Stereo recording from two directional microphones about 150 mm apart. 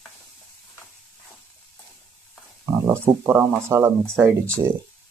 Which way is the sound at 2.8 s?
15° right (ahead or behind).